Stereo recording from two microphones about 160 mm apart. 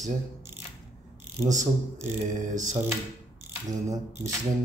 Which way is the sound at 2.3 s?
50° right (ahead or behind).